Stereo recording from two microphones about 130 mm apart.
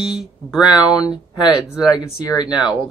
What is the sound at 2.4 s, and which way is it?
Speech, 5° right (ahead or behind).